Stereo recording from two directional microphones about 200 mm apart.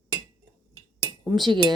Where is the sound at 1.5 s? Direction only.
25° right (ahead or behind).